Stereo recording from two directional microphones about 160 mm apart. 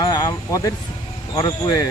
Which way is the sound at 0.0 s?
25° left (ahead or behind).